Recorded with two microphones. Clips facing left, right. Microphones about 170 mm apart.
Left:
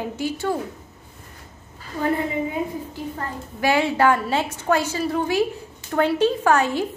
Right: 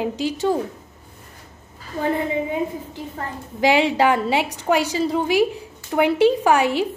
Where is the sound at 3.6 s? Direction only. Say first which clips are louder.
Right 2 dB; 15° right (ahead or behind).